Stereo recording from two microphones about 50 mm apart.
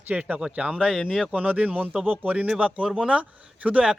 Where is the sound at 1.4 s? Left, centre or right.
Right.